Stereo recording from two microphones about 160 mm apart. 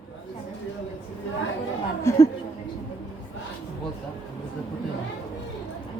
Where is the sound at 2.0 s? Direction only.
20° left (ahead or behind).